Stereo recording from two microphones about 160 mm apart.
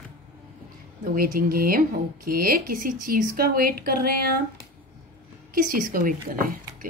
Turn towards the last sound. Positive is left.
turn(degrees=-60)  # may be behind; listen again after turning